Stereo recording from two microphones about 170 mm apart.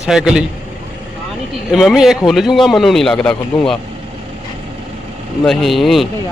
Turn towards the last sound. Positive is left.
turn(degrees=0)  # may be behind; listen again after turning